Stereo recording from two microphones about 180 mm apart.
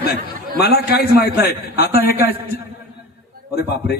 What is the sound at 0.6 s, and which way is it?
A man's voice, 60° left (ahead or behind).